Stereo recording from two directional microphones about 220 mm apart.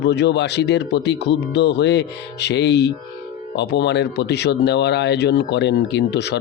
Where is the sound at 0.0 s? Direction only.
50° left (ahead or behind).